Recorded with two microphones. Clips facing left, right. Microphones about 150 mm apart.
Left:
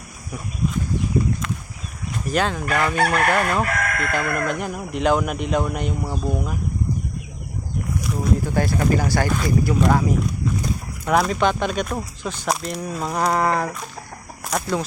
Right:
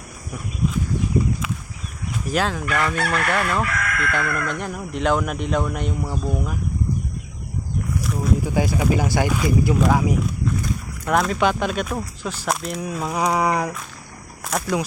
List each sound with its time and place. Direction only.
2.3 s speech: centre (ahead or behind)
2.6 s chicken: 35° left (ahead or behind)
4.5 s speech: 5° left (ahead or behind)
8.0 s boat: centre (ahead or behind)
8.4 s speech: 10° right (ahead or behind)
11.0 s speech: centre (ahead or behind)
13.3 s speech: 15° right (ahead or behind)